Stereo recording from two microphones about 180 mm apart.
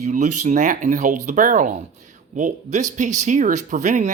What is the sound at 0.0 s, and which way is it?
Speech, 40° right (ahead or behind).